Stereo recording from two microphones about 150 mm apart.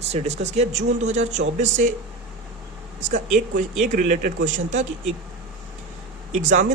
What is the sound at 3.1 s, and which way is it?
Speech, 60° right (ahead or behind).